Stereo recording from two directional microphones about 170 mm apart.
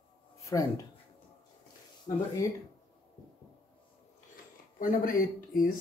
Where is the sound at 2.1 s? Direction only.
40° left (ahead or behind).